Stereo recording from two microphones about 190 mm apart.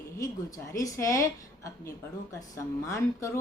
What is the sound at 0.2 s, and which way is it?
A woman's voice, 15° left (ahead or behind).